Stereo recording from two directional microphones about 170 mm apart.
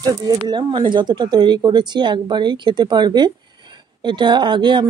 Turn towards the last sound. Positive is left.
turn(degrees=-25)  # may be behind; listen again after turning